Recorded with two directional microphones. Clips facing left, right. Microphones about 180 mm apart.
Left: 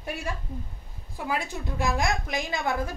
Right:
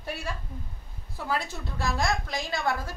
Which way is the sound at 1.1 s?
15° left (ahead or behind).